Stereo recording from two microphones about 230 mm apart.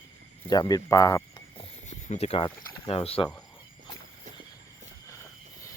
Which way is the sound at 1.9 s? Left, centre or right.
Left.